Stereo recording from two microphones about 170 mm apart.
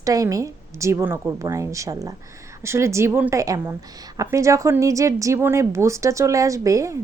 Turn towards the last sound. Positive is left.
turn(degrees=-20)  # may be behind; listen again after turning